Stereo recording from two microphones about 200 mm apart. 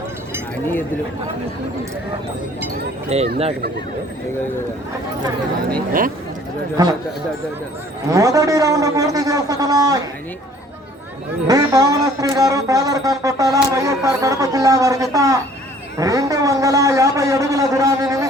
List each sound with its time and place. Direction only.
3.1 s speech: 35° right (ahead or behind)
6.8 s speech: 20° right (ahead or behind)
8.1 s speech: 15° right (ahead or behind)
11.4 s speech: 20° right (ahead or behind)